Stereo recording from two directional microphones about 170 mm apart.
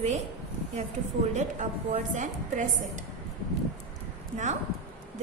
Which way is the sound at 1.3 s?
45° right (ahead or behind).